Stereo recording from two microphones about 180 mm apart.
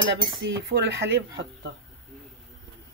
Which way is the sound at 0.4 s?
75° right (ahead or behind).